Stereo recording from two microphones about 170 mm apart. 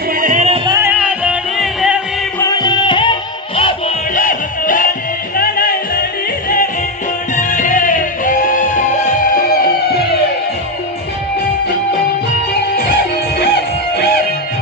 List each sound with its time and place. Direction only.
0.1 s music: 50° right (ahead or behind); by 0.8 s 30° right (ahead or behind)
0.8 s music: 10° right (ahead or behind)
2.4 s music: 20° left (ahead or behind)
4.1 s music: 50° left (ahead or behind)
7.3 s music: 50° left (ahead or behind)
13.9 s music: 70° left (ahead or behind)